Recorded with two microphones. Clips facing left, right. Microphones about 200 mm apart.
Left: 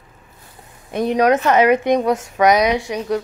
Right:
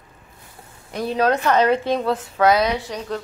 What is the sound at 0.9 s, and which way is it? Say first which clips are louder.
A woman's voice: left 4 dB; 20° left (ahead or behind).